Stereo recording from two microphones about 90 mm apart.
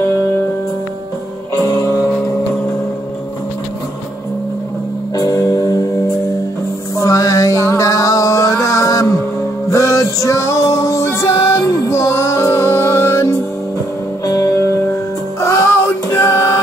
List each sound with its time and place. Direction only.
1.6 s music: 40° left (ahead or behind)
5.1 s music: 40° left (ahead or behind)
7.0 s music: 40° left (ahead or behind)
14.2 s music: 40° left (ahead or behind)